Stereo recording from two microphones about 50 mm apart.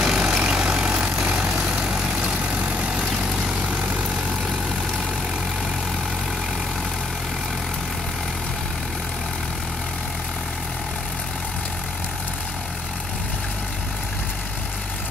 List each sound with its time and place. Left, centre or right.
0.0 s vehicle: centre